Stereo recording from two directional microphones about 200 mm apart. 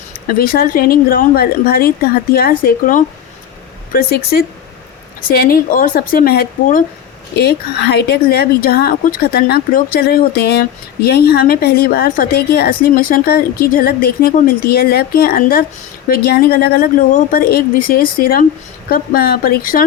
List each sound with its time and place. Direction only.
0.3 s a woman's voice: 50° left (ahead or behind)